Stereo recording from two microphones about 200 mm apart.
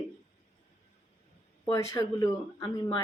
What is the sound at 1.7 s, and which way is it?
Speech, 15° left (ahead or behind).